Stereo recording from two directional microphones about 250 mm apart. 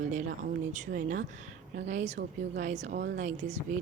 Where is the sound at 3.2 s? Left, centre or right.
Right.